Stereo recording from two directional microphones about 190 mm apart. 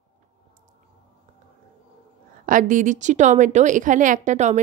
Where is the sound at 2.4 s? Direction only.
45° right (ahead or behind).